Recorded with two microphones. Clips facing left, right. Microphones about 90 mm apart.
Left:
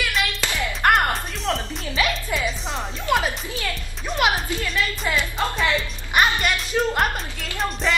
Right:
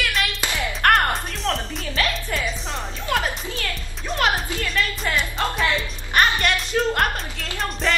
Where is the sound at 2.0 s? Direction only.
15° left (ahead or behind).